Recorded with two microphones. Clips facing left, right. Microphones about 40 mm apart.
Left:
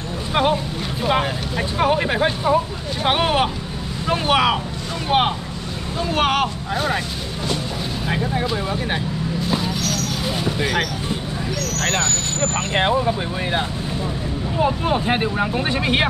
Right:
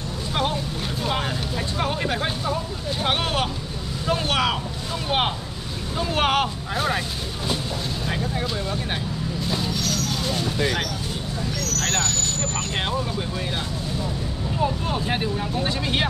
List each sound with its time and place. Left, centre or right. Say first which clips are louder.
0.3 s a sound: left 7 dB; left
1.0 s speech: left 7 dB; left; by 7.0 s centre
8.1 s speech: left 6 dB; centre
9.5 s basketball bounce: left 4 dB; centre
9.8 s a sound: left 2 dB; centre
11.8 s speech: left 4 dB; centre